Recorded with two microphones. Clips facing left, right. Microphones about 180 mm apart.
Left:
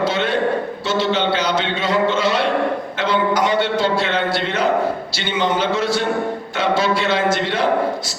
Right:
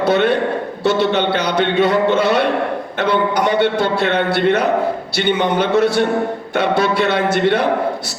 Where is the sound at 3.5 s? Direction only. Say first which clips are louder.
Right 2 dB; 60° right (ahead or behind).